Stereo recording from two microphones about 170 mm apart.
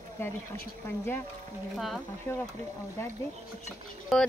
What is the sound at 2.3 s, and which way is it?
Speech, 15° left (ahead or behind).